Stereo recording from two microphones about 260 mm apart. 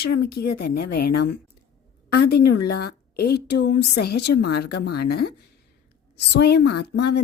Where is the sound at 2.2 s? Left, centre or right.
Left.